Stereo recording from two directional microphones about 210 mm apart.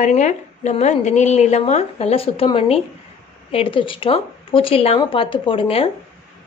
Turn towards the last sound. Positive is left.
turn(degrees=25)  # may be behind; listen again after turning